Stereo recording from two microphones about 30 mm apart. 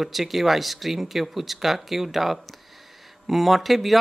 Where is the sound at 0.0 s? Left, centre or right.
Centre.